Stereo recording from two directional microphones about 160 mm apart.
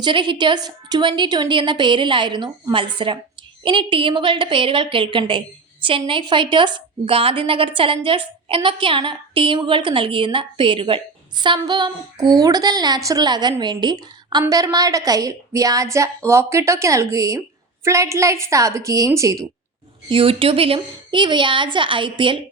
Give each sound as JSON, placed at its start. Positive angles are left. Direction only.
{"t": 0.0, "sound": "a woman's voice", "side_deg": -30}
{"t": 20.1, "sound": "a woman's voice", "side_deg": -35}